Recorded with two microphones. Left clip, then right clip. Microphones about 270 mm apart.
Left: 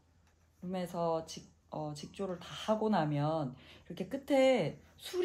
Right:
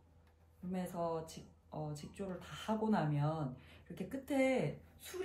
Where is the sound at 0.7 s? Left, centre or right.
Left.